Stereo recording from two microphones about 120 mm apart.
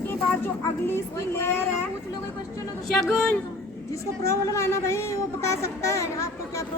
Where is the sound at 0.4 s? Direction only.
20° left (ahead or behind).